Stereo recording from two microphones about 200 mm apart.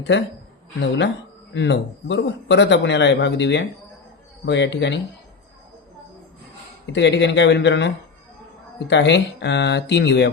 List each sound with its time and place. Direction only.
0.0 s speech: 60° left (ahead or behind)
6.9 s speech: 60° left (ahead or behind)